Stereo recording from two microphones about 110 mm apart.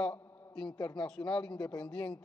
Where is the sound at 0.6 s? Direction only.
40° left (ahead or behind).